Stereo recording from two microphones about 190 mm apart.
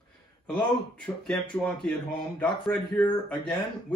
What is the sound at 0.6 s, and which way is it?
Speech, 5° left (ahead or behind).